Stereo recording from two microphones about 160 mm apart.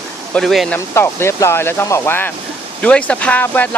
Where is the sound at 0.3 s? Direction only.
Centre (ahead or behind).